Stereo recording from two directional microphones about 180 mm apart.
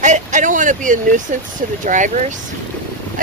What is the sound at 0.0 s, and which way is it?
Speech, 40° right (ahead or behind).